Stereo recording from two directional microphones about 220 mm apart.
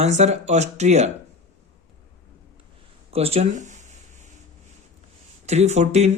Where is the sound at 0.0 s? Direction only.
30° right (ahead or behind).